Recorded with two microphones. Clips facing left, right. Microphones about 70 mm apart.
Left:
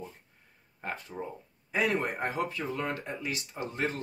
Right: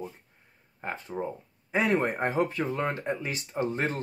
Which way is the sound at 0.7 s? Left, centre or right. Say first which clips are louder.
Right 4 dB; right.